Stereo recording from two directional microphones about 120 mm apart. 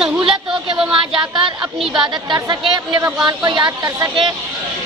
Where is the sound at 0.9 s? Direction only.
45° right (ahead or behind).